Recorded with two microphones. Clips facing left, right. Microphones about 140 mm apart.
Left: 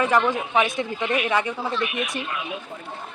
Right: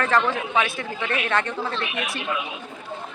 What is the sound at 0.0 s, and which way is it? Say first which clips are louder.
Speech: left 1 dB; 15° left (ahead or behind).